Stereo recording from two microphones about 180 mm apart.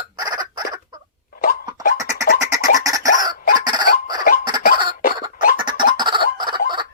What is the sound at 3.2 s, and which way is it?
Chicken, 20° right (ahead or behind).